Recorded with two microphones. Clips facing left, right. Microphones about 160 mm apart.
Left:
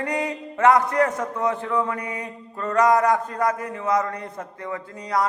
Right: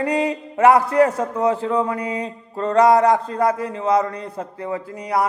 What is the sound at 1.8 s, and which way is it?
A man's voice, 30° right (ahead or behind).